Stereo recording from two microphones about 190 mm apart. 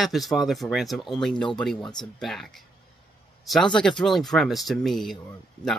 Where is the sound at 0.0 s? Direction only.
Centre (ahead or behind).